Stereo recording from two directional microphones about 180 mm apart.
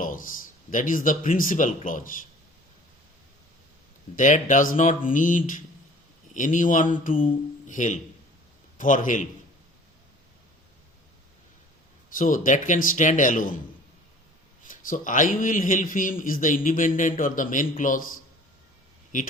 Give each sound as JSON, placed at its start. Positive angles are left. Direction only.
{"t": 0.0, "sound": "speech", "side_deg": 50}
{"t": 4.1, "sound": "a man's voice", "side_deg": 45}
{"t": 12.1, "sound": "a man's voice", "side_deg": 50}
{"t": 14.6, "sound": "a man's voice", "side_deg": 45}